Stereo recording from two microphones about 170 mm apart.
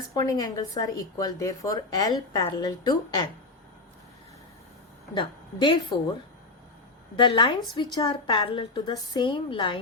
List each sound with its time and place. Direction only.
0.1 s speech: 20° left (ahead or behind)
5.1 s speech: 30° left (ahead or behind)
7.2 s speech: 30° left (ahead or behind)